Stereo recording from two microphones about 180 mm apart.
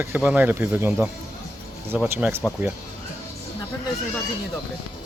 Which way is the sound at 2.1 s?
10° right (ahead or behind).